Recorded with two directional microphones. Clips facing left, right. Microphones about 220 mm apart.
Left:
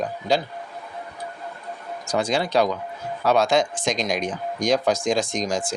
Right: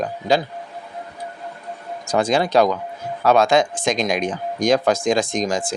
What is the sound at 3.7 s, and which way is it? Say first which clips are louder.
Speech: right 4 dB; 55° right (ahead or behind).